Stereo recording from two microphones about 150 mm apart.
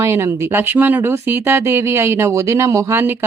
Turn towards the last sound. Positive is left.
turn(degrees=-15)  # may be behind; listen again after turning